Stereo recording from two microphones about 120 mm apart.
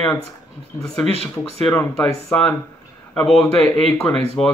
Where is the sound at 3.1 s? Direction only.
5° left (ahead or behind).